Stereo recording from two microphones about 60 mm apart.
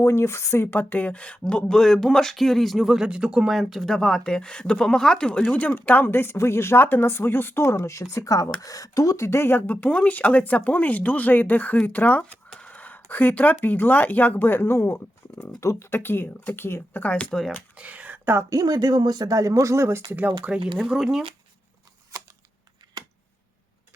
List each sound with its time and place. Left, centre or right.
0.0 s speech: left; by 2.8 s centre
2.8 s speech: centre
3.5 s speech: centre
5.4 s speech: left
8.6 s speech: left
9.8 s speech: left
12.5 s a sound: left
13.6 s speech: left
17.0 s speech: left
17.7 s a sound: right
18.5 s speech: right
20.1 s speech: right
20.4 s speech: centre